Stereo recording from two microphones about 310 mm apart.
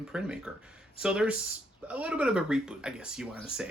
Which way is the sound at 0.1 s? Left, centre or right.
Centre.